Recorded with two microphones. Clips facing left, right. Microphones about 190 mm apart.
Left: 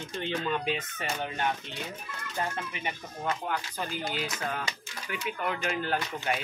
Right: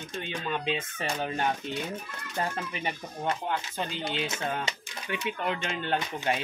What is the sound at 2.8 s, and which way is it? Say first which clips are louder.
Speech: right 2 dB; 30° right (ahead or behind).